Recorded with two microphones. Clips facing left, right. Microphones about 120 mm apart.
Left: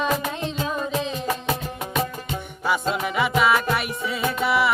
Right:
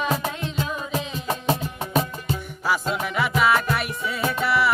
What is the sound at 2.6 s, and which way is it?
Music, centre (ahead or behind).